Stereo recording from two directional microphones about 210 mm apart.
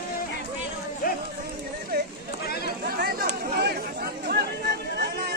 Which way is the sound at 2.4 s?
50° left (ahead or behind).